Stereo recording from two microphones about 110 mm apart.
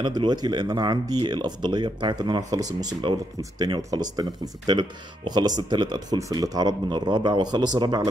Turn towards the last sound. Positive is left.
turn(degrees=-40)  # may be behind; listen again after turning